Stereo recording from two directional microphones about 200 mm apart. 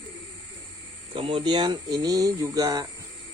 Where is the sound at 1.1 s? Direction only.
25° right (ahead or behind).